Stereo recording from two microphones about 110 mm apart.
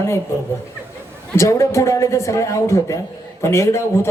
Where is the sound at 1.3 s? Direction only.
25° left (ahead or behind).